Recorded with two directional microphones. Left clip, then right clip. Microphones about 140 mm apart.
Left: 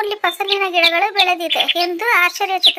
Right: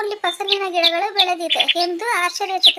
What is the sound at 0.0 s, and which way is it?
Speech, 15° left (ahead or behind).